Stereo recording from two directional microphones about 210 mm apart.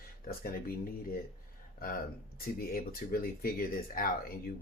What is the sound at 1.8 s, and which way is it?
Speech, 45° left (ahead or behind).